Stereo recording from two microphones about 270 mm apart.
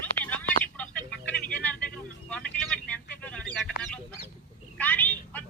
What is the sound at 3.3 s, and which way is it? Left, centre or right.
Bird, centre.